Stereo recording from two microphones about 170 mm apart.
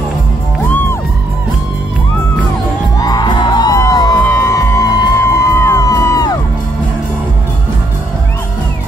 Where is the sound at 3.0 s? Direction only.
25° left (ahead or behind).